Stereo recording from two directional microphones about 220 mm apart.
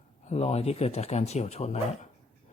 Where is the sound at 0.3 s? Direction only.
30° left (ahead or behind).